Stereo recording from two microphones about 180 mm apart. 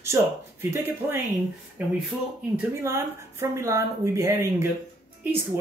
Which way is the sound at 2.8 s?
15° right (ahead or behind).